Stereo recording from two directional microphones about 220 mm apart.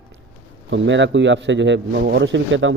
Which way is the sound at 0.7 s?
55° right (ahead or behind).